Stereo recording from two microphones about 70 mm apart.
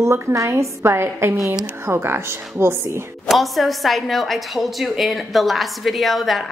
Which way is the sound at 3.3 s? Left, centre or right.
Centre.